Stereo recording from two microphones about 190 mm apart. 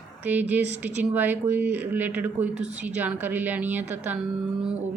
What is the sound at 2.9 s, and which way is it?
Speech, 10° right (ahead or behind).